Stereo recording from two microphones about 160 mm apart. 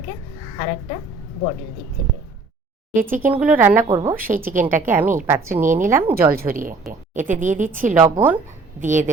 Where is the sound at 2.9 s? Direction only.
60° right (ahead or behind).